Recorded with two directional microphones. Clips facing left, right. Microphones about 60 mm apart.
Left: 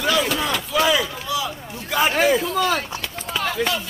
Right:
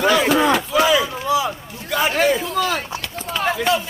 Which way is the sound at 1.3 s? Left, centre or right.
Right.